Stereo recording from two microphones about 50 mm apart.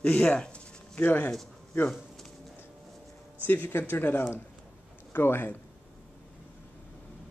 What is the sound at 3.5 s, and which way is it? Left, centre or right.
Speech, left.